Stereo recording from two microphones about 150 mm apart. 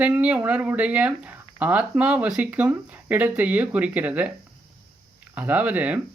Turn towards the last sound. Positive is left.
turn(degrees=-10)  # may be behind; listen again after turning